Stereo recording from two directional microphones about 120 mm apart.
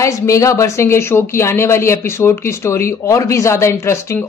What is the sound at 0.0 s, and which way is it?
Speech, 25° left (ahead or behind).